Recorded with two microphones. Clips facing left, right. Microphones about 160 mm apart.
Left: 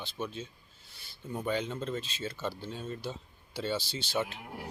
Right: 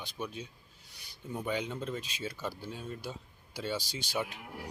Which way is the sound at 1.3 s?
10° right (ahead or behind).